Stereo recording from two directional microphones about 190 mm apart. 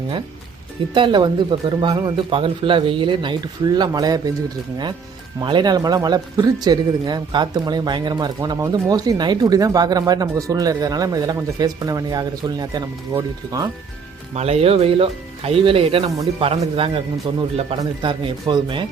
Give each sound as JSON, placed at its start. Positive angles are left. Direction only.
{"t": 0.9, "sound": "speech", "side_deg": -25}
{"t": 5.4, "sound": "speech", "side_deg": -25}
{"t": 14.3, "sound": "speech", "side_deg": -35}